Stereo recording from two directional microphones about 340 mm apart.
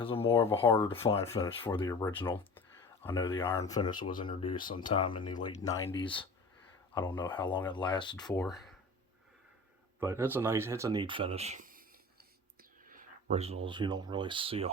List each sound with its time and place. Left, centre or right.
0.0 s speech: centre
6.9 s speech: centre
8.4 s speech: centre
10.0 s speech: centre; by 11.9 s right
12.9 s a sound: right
13.7 s speech: centre